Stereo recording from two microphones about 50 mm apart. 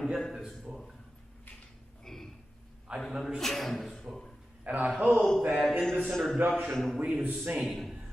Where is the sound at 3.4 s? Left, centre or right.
Centre.